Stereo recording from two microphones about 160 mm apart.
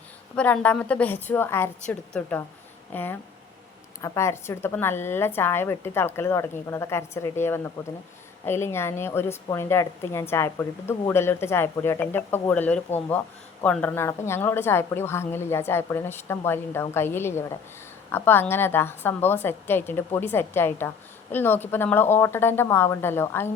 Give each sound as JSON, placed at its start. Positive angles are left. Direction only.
{"t": 0.3, "sound": "a woman's voice", "side_deg": 10}